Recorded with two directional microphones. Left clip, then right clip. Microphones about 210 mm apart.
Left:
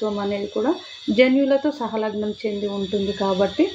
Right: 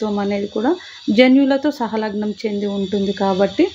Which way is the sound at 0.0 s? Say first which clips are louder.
Right 3 dB; 50° right (ahead or behind).